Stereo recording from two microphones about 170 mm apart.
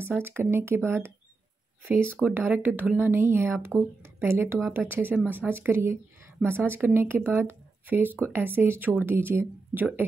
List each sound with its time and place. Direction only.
0.2 s speech: 15° right (ahead or behind)
2.2 s speech: 10° right (ahead or behind)